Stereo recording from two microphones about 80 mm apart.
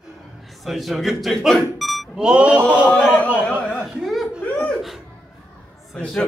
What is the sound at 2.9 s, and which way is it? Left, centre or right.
Speech, centre.